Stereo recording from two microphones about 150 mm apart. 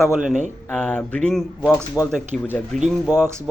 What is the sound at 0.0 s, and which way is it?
Speech, 5° right (ahead or behind).